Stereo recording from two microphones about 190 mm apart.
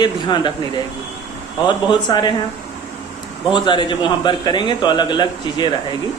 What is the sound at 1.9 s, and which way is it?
Speech, 25° left (ahead or behind).